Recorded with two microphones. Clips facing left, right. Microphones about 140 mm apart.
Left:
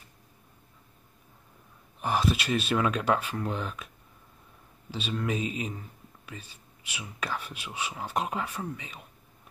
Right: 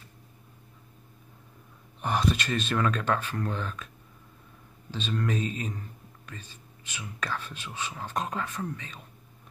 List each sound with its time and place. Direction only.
2.0 s a man's voice: centre (ahead or behind)
4.9 s a man's voice: 10° left (ahead or behind)